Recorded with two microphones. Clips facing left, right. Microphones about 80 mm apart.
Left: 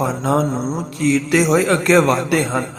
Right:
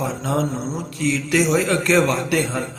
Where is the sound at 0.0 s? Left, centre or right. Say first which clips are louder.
Left 5 dB; left.